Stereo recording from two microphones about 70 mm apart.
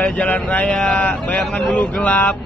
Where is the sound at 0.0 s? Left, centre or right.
Centre.